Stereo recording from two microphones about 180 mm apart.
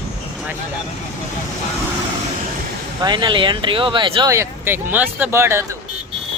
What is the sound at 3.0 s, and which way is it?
Speech, 25° right (ahead or behind).